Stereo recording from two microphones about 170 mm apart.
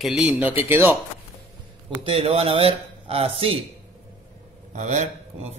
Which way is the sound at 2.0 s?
35° right (ahead or behind).